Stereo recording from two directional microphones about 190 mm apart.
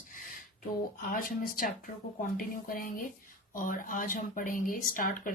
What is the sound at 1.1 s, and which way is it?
Speech, 50° left (ahead or behind).